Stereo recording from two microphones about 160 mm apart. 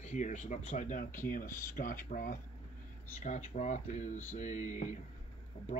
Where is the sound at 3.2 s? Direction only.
45° left (ahead or behind).